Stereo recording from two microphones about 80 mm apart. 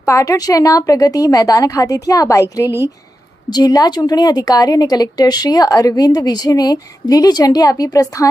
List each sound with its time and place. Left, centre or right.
0.0 s a woman's voice: left